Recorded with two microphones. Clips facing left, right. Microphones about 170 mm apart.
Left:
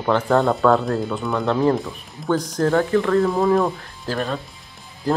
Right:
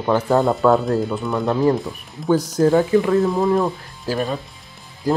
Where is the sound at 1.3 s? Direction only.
15° right (ahead or behind).